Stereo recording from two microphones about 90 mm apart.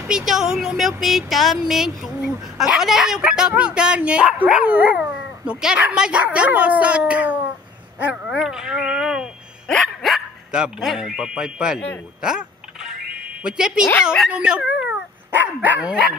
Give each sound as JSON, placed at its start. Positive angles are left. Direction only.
{"t": 0.1, "sound": "a woman's voice", "side_deg": -5}
{"t": 12.2, "sound": "a sound", "side_deg": -10}
{"t": 13.4, "sound": "a woman's voice", "side_deg": -10}